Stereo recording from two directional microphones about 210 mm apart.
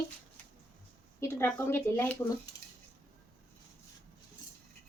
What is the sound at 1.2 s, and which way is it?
A woman's voice, 10° left (ahead or behind).